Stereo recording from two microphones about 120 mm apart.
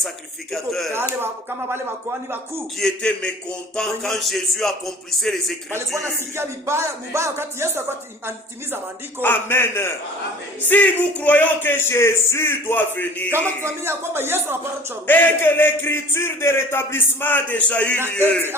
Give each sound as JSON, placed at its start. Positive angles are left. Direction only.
{"t": 0.5, "sound": "speech", "side_deg": 0}
{"t": 1.2, "sound": "speech", "side_deg": -20}
{"t": 2.7, "sound": "a man's voice", "side_deg": 5}
{"t": 5.7, "sound": "speech", "side_deg": -20}
{"t": 9.2, "sound": "a man's voice", "side_deg": 15}
{"t": 13.7, "sound": "speech", "side_deg": -20}
{"t": 15.0, "sound": "a man's voice", "side_deg": 15}